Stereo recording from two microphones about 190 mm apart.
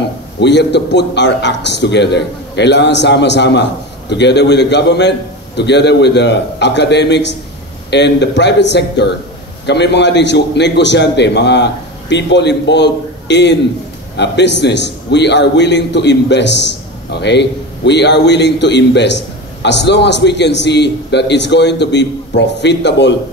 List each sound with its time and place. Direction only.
0.4 s a man's voice: 65° left (ahead or behind)